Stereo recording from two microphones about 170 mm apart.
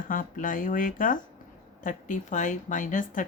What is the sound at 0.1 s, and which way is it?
Speech, 50° left (ahead or behind).